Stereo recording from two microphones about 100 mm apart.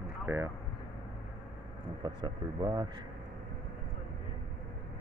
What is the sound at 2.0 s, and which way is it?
Speech, 50° right (ahead or behind).